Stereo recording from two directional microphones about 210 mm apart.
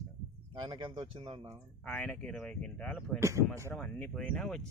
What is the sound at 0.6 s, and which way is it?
Speech, 20° right (ahead or behind).